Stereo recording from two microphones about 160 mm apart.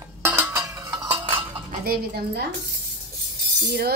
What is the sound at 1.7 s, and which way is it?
Dishes, 70° right (ahead or behind).